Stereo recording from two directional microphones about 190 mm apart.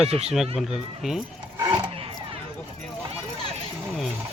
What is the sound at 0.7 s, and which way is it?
Speech, centre (ahead or behind).